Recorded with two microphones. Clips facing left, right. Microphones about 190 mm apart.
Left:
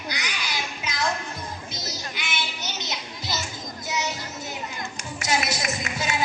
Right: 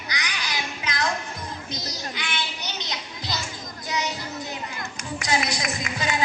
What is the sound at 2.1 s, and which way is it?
Child singing, 10° left (ahead or behind).